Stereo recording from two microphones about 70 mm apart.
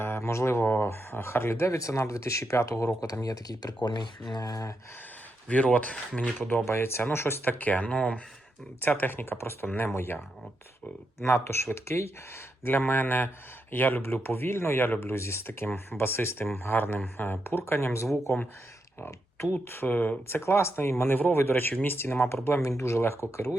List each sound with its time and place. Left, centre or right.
0.0 s speech: left
3.8 s speech: left
5.5 s speech: left
6.5 s speech: left
19.6 s speech: left